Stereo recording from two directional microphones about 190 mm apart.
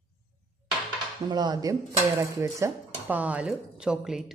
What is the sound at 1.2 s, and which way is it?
Speech, 20° right (ahead or behind).